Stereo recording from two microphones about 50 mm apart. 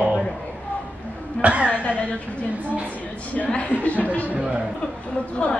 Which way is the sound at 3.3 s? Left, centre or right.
Left.